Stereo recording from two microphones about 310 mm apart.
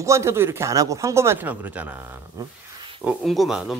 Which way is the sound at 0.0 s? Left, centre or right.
Centre.